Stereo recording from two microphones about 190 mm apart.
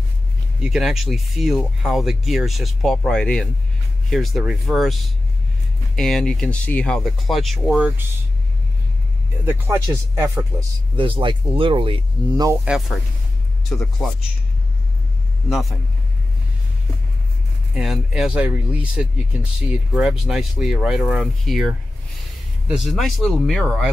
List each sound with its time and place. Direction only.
0.6 s speech: 5° right (ahead or behind)
9.5 s speech: 15° right (ahead or behind)
11.0 s speech: 25° right (ahead or behind)
12.6 s speech: centre (ahead or behind)
17.7 s speech: centre (ahead or behind)